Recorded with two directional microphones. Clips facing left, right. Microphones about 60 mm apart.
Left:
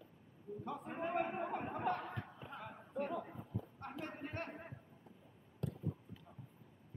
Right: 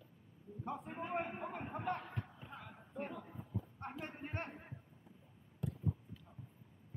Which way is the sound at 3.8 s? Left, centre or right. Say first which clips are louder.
Left 2 dB; right.